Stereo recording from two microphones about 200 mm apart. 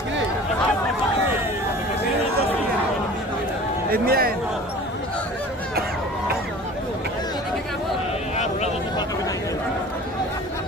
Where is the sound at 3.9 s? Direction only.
50° right (ahead or behind).